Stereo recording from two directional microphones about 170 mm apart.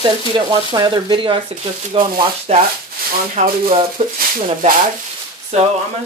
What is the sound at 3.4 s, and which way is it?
Speech, 45° right (ahead or behind).